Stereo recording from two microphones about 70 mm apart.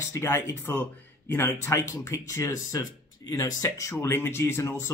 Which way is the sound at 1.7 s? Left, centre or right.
Left.